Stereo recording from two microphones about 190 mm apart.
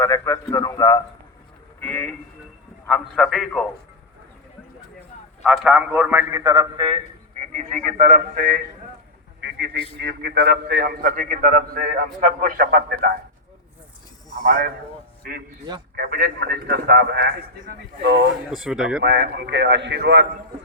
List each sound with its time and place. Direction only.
0.0 s a man's voice: 15° left (ahead or behind)
1.8 s a man's voice: 10° left (ahead or behind)
5.5 s a man's voice: 5° right (ahead or behind); by 8.6 s 50° right (ahead or behind)
9.4 s a sound: 65° right (ahead or behind)
10.0 s a man's voice: 60° right (ahead or behind)
15.2 s a man's voice: 55° right (ahead or behind)
18.5 s a man's voice: 5° right (ahead or behind)
19.0 s a man's voice: 65° right (ahead or behind)